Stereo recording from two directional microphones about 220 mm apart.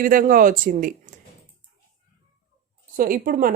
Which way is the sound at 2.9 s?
40° right (ahead or behind).